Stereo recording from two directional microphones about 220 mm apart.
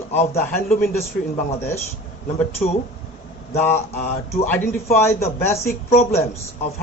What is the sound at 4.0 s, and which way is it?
Speech, 30° left (ahead or behind).